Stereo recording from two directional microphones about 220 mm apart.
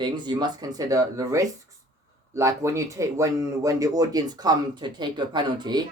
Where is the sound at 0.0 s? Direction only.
20° right (ahead or behind).